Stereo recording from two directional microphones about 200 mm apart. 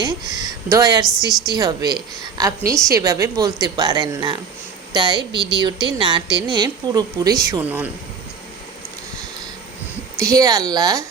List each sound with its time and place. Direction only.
0.0 s a woman's voice: 20° right (ahead or behind)
5.3 s speech: 55° right (ahead or behind)
5.5 s a woman's voice: 20° right (ahead or behind)
10.2 s speech: 15° right (ahead or behind)